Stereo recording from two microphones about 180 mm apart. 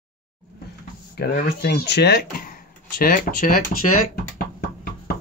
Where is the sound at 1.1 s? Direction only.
60° left (ahead or behind).